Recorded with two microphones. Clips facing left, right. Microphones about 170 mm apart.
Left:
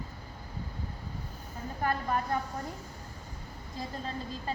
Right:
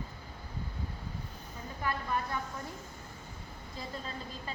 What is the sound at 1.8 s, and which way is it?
Speech, 40° left (ahead or behind).